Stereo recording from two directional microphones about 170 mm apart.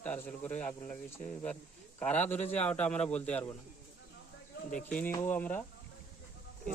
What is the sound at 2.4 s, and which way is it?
Speech, 40° left (ahead or behind).